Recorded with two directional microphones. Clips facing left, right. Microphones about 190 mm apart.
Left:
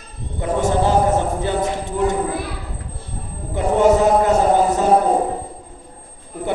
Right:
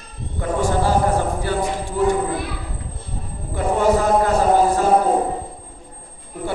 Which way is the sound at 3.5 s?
20° left (ahead or behind).